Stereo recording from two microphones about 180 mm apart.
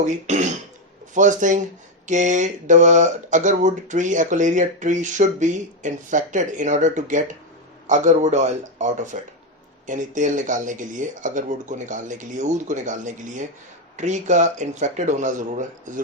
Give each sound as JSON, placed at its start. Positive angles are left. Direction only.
{"t": 0.0, "sound": "speech", "side_deg": -40}